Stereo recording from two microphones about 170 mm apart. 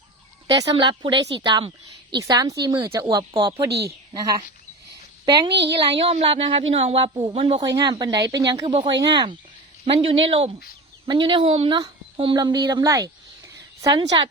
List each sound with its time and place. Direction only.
0.5 s speech: 25° right (ahead or behind)
5.5 s a woman's voice: 90° right
5.9 s speech: 35° right (ahead or behind)